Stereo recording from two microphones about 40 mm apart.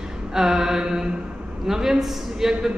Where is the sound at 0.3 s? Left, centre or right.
Centre.